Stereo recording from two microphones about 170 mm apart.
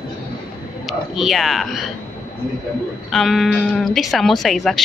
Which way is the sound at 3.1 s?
Centre (ahead or behind).